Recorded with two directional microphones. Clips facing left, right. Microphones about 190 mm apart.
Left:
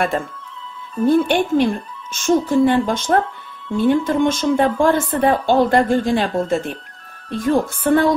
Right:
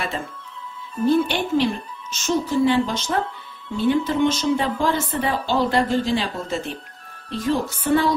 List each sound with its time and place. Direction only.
1.0 s a woman's voice: 50° left (ahead or behind)